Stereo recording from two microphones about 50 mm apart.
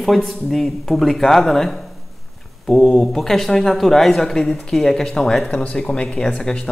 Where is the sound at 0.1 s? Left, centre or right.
Centre.